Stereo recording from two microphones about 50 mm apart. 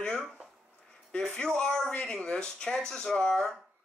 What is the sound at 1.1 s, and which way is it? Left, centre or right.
Speech, centre.